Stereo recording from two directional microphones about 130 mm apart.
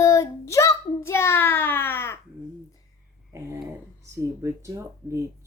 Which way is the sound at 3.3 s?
20° right (ahead or behind).